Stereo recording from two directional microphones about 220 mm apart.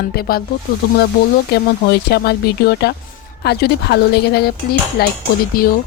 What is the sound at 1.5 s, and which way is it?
Speech, 45° left (ahead or behind).